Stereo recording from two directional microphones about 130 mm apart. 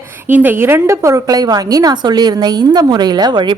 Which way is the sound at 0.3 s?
15° right (ahead or behind).